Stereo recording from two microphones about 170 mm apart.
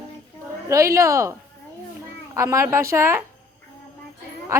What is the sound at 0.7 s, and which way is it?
Speech, 15° right (ahead or behind).